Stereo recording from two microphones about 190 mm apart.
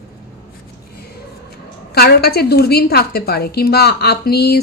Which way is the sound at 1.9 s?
55° left (ahead or behind).